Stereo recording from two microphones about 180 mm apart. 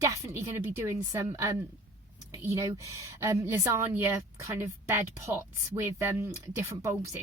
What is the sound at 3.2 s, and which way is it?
Speech, 15° right (ahead or behind).